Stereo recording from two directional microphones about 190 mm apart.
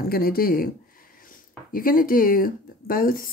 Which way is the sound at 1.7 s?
50° left (ahead or behind).